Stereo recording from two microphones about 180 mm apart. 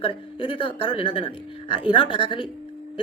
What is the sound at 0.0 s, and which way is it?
A man's voice, 30° left (ahead or behind).